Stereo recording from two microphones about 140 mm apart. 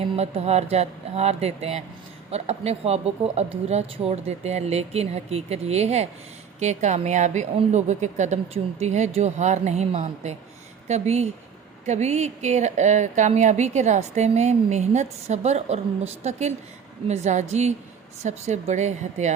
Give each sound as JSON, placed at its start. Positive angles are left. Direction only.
{"t": 0.0, "sound": "speech", "side_deg": -50}